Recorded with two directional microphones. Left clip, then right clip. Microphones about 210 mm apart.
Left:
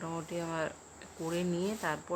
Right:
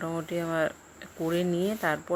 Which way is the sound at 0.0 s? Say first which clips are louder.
Right 6 dB; 15° right (ahead or behind).